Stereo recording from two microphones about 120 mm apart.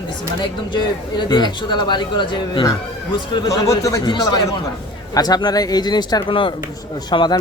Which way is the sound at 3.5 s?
25° left (ahead or behind).